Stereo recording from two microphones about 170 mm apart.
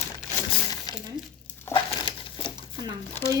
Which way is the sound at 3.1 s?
15° left (ahead or behind).